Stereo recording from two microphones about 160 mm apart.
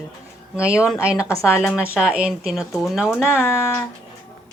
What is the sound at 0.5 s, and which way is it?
Speech, 5° right (ahead or behind).